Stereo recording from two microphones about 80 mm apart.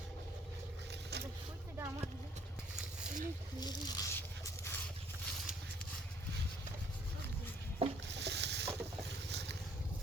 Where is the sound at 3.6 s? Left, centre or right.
Left.